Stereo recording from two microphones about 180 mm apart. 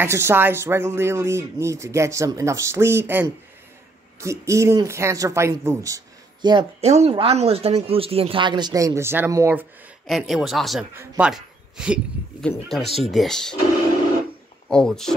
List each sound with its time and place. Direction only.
0.0 s speech: 15° right (ahead or behind)
6.8 s speech: 35° right (ahead or behind); by 9.7 s 15° right (ahead or behind)
10.0 s speech: centre (ahead or behind)
14.7 s speech: 5° left (ahead or behind)